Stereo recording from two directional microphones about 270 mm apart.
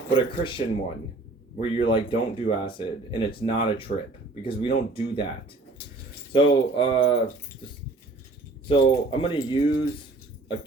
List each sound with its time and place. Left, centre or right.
0.1 s speech: centre
6.3 s speech: centre
8.6 s speech: centre